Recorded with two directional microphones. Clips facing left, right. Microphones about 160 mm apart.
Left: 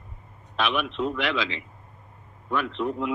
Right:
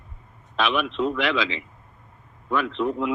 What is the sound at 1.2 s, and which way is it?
Speech, 90° right.